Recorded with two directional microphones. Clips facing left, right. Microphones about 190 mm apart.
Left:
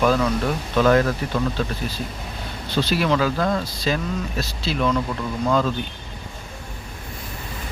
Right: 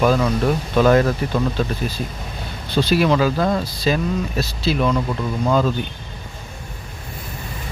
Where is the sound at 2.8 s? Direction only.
15° right (ahead or behind).